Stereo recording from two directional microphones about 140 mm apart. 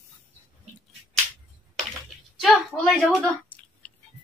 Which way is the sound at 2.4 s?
Centre (ahead or behind).